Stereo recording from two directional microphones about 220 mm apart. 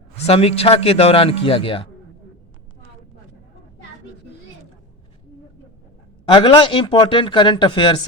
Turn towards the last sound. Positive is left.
turn(degrees=20)  # may be behind; listen again after turning